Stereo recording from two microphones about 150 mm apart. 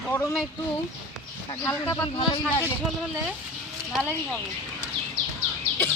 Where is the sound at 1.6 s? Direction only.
15° left (ahead or behind).